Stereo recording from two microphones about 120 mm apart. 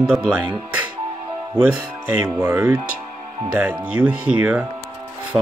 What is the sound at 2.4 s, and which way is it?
Speech, 25° right (ahead or behind).